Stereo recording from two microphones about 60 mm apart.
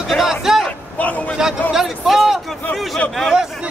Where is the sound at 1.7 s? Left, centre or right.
Centre.